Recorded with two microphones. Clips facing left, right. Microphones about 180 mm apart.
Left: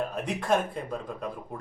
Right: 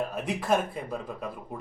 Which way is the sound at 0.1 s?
5° right (ahead or behind).